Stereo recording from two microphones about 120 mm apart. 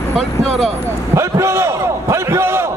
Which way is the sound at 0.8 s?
25° right (ahead or behind).